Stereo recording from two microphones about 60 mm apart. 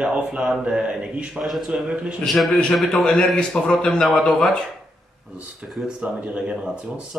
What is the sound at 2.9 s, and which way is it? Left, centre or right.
Speech, centre.